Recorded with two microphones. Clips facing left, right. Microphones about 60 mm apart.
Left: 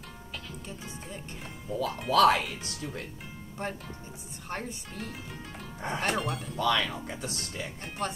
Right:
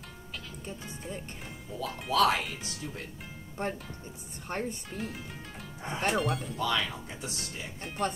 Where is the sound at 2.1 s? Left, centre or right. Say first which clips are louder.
Left 3 dB; left.